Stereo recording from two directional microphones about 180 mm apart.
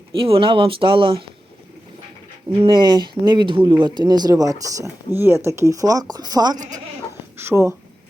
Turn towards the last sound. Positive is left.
turn(degrees=-15)  # may be behind; listen again after turning